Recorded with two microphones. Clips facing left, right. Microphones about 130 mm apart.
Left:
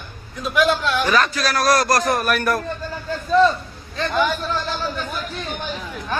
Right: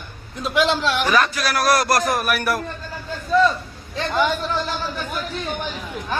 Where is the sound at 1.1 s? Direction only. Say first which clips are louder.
Even; 15° right (ahead or behind).